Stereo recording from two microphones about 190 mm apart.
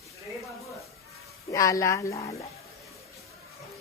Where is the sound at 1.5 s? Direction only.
15° left (ahead or behind).